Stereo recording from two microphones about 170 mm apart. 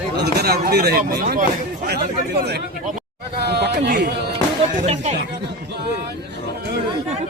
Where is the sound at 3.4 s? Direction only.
75° right (ahead or behind).